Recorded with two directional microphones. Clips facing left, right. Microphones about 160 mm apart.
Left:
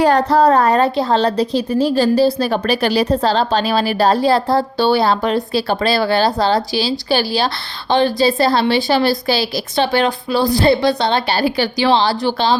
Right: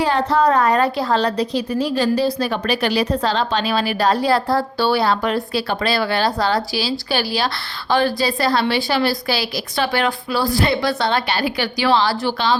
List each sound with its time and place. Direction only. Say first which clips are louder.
0.0 s a woman's voice: left 4 dB; 40° left (ahead or behind)